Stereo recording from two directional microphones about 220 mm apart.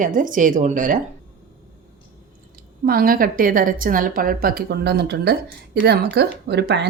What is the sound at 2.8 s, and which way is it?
A woman's voice, 40° right (ahead or behind).